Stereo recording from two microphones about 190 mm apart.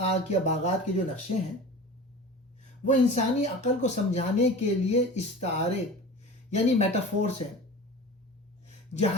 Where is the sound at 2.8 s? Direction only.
40° left (ahead or behind).